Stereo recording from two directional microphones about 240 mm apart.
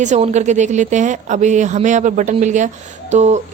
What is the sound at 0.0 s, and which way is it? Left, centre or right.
Speech, right.